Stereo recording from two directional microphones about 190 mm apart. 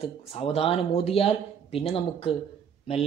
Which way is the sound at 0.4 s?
30° left (ahead or behind).